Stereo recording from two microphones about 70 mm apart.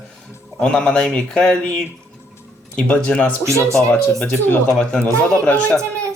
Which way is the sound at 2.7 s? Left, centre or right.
Centre.